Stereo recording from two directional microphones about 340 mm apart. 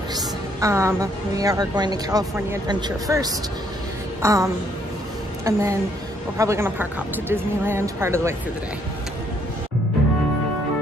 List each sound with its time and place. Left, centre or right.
0.1 s a woman's voice: centre
4.2 s a sound: centre
5.4 s a woman's voice: centre